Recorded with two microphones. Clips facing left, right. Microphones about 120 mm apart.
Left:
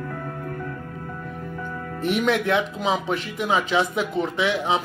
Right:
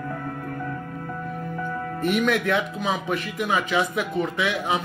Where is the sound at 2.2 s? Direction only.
25° left (ahead or behind).